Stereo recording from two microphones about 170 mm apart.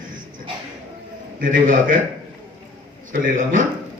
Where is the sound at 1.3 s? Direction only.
55° right (ahead or behind).